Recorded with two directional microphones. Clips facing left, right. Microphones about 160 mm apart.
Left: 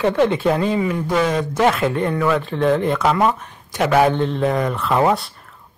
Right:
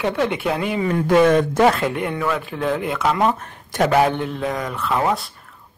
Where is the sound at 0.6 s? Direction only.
30° left (ahead or behind).